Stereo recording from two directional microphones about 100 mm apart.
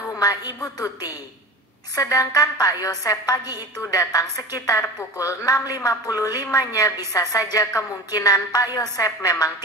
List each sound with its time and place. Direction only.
0.2 s a woman's voice: 35° left (ahead or behind)